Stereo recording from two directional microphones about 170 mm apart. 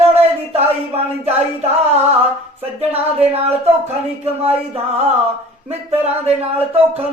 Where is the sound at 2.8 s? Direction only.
35° right (ahead or behind).